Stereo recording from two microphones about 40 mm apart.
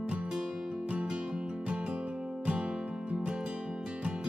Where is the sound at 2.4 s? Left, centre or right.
Right.